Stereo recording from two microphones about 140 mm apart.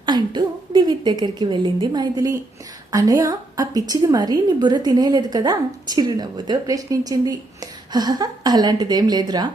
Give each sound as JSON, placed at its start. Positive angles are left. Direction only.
{"t": 0.0, "sound": "a woman's voice", "side_deg": -30}